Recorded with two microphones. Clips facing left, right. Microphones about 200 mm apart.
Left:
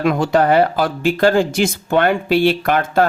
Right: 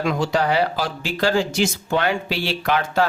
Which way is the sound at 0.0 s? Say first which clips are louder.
Left 6 dB; 55° left (ahead or behind).